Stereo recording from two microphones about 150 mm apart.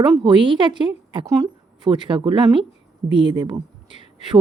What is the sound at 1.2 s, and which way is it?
Speech, 20° right (ahead or behind).